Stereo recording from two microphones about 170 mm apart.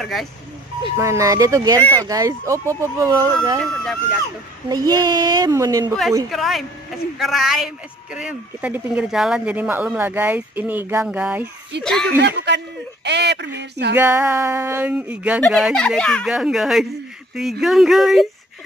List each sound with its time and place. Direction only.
0.0 s speech: centre (ahead or behind)
0.9 s speech: 15° right (ahead or behind)
1.8 s speech: 10° left (ahead or behind)
2.0 s speech: 20° right (ahead or behind)
3.8 s speech: 5° left (ahead or behind)
4.6 s speech: 25° right (ahead or behind)
6.3 s speech: centre (ahead or behind)
11.8 s speech: 5° left (ahead or behind)
12.2 s speech: 85° right
13.6 s a sound: 80° right
13.9 s speech: 15° right (ahead or behind)